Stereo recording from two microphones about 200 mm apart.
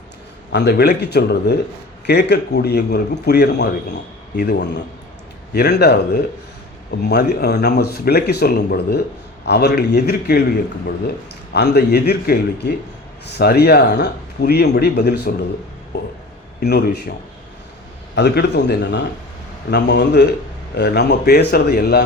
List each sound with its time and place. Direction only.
0.5 s a man's voice: 55° left (ahead or behind)
7.0 s speech: 55° left (ahead or behind)
11.5 s a man's voice: 55° left (ahead or behind)
16.6 s a man's voice: 55° left (ahead or behind)